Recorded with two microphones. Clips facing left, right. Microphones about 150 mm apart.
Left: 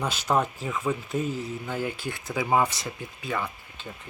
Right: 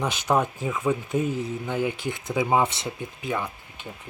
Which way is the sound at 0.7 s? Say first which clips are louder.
Right 5 dB; 5° right (ahead or behind).